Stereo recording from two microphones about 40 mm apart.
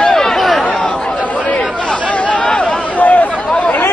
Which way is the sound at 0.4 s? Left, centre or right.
Centre.